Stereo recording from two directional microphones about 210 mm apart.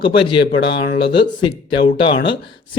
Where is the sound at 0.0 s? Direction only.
25° left (ahead or behind).